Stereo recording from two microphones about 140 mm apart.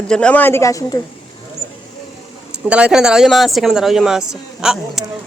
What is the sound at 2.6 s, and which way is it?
A man's voice, 10° right (ahead or behind).